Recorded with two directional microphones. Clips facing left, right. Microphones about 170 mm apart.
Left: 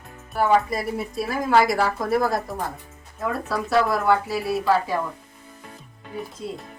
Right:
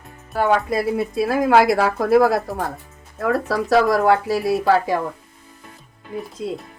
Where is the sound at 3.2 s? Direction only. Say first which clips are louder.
Right 6 dB; 85° right.